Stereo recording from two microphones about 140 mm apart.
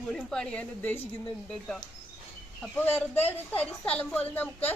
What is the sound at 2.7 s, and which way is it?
A woman's voice, 10° left (ahead or behind).